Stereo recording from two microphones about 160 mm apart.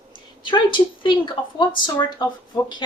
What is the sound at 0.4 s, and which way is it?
Speech, 30° left (ahead or behind).